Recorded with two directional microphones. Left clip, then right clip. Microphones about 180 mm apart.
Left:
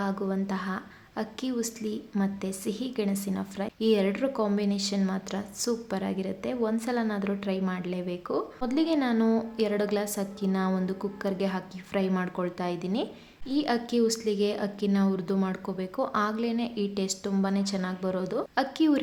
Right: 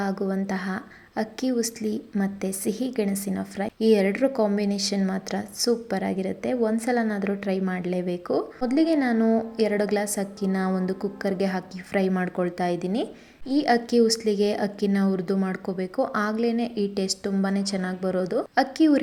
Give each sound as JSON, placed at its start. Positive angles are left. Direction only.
{"t": 0.0, "sound": "a woman's voice", "side_deg": -15}